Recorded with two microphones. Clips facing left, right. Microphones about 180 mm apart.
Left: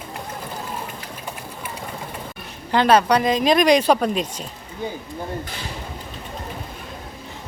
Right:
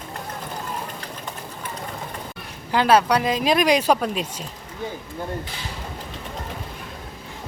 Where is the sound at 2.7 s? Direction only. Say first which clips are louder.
Left 2 dB; 5° right (ahead or behind).